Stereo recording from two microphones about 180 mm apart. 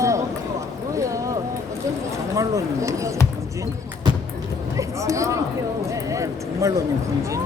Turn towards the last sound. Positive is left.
turn(degrees=-15)  # may be behind; listen again after turning